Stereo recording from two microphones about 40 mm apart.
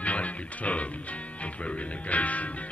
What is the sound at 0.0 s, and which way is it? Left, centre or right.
Music, left.